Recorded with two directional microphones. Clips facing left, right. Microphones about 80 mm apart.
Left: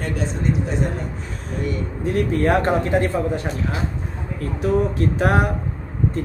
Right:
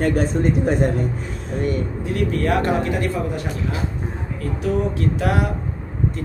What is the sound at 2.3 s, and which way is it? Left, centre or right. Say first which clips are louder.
Speech: left 1 dB; left.